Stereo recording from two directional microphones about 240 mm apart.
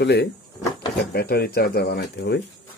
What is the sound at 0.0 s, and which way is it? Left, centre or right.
Speech, left.